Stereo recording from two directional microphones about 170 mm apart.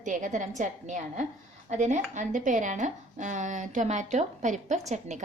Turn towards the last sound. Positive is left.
turn(degrees=-45)  # may be behind; listen again after turning